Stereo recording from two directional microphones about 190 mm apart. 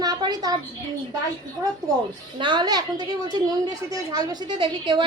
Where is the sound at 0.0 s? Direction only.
20° right (ahead or behind).